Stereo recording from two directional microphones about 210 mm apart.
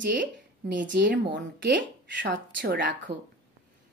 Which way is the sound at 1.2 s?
60° right (ahead or behind).